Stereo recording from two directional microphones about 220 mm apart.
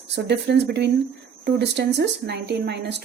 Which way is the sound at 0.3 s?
50° right (ahead or behind).